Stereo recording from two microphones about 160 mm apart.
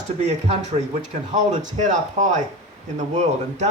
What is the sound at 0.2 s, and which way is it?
Speech, 45° right (ahead or behind).